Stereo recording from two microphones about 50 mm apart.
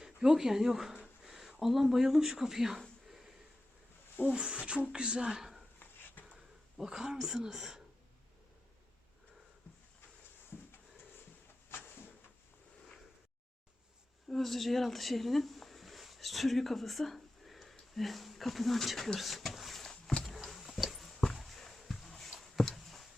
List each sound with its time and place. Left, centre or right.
0.0 s speech: centre
3.1 s sniff: centre
4.3 s speech: centre
11.7 s a sound: left
14.3 s speech: centre
20.2 s a sound: centre